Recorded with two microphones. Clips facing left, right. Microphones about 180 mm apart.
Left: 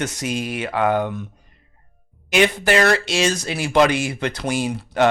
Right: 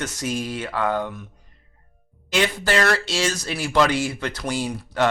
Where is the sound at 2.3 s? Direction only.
15° left (ahead or behind).